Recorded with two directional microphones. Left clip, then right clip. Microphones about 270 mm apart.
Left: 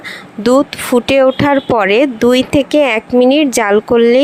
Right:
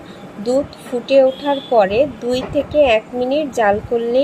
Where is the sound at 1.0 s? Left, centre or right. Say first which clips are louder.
Even; left.